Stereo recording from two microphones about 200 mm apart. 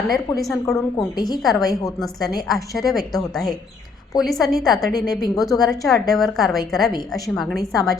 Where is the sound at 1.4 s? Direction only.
Centre (ahead or behind).